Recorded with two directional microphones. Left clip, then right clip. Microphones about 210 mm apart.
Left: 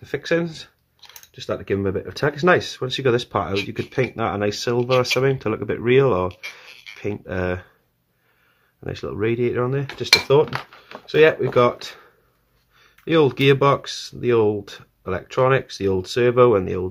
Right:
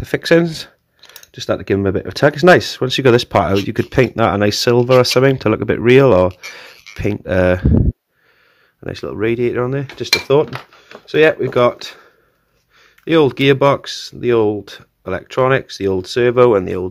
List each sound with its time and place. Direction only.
0.0 s speech: 35° right (ahead or behind)
8.8 s speech: 30° right (ahead or behind)